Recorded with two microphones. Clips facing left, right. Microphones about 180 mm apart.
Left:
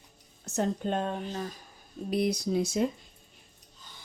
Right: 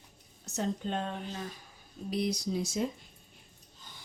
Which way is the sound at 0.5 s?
50° left (ahead or behind).